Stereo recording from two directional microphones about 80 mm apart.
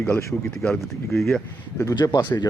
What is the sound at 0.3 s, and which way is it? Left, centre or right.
Speech, centre.